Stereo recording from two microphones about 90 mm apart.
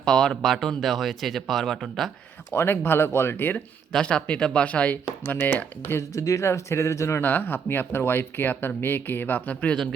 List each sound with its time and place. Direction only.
0.0 s speech: 5° left (ahead or behind)
2.5 s speech: 25° left (ahead or behind)
3.9 s speech: 10° left (ahead or behind); by 7.2 s 35° left (ahead or behind)
7.2 s speech: 20° left (ahead or behind)